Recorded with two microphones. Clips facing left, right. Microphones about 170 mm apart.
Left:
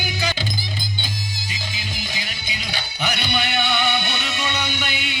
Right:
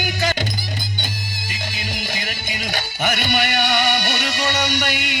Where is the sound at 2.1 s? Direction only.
50° right (ahead or behind).